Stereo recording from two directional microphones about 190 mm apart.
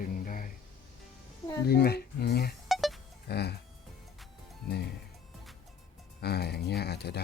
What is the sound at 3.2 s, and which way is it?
Speech, 60° left (ahead or behind).